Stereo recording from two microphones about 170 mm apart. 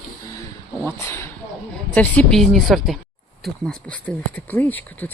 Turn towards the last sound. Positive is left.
turn(degrees=10)  # may be behind; listen again after turning